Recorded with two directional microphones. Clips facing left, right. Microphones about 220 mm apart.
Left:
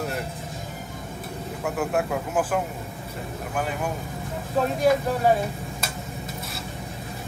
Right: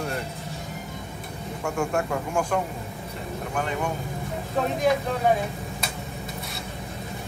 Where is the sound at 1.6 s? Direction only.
5° left (ahead or behind).